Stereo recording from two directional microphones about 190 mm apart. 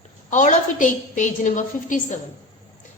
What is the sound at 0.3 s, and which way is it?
A woman's voice, 40° left (ahead or behind).